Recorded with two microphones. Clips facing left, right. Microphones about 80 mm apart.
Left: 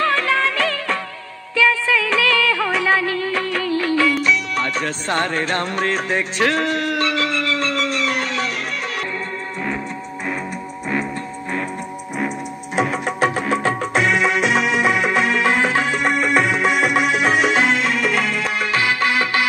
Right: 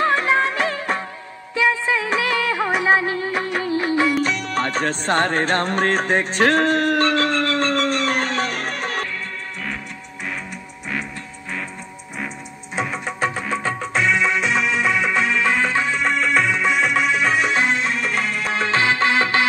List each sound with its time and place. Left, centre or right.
0.0 s music of bollywood: right
4.2 s music: right
12.7 s music: left
18.5 s music: right